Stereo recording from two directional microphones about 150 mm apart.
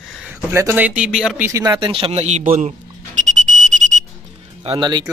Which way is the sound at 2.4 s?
65° right (ahead or behind).